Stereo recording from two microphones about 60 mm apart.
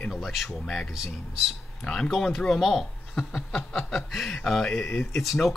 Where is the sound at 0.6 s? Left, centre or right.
Centre.